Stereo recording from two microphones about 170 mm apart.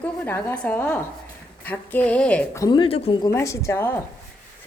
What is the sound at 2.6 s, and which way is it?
Speech, 30° left (ahead or behind).